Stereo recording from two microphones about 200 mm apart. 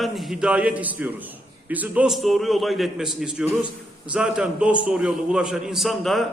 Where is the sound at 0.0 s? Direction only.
Centre (ahead or behind).